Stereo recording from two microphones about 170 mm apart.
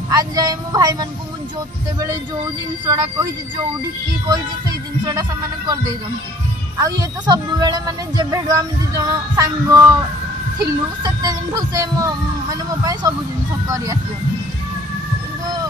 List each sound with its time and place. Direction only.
0.1 s speech: 20° right (ahead or behind)
2.9 s speech: 20° right (ahead or behind)
6.8 s speech: 20° right (ahead or behind)